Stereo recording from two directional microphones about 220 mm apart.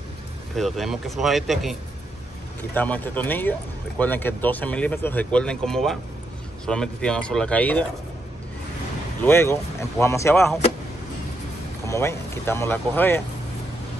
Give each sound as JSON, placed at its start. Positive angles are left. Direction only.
{"t": 0.6, "sound": "speech", "side_deg": 0}
{"t": 9.2, "sound": "speech", "side_deg": 10}
{"t": 11.8, "sound": "speech", "side_deg": 10}